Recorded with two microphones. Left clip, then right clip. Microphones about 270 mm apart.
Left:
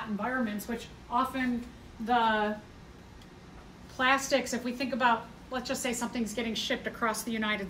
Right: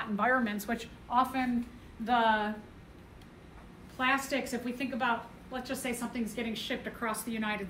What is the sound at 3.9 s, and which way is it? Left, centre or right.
A woman's voice, centre.